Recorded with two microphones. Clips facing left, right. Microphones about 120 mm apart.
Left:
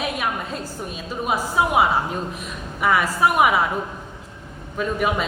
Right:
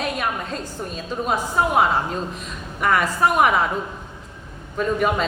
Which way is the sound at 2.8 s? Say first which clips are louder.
Even; 5° left (ahead or behind).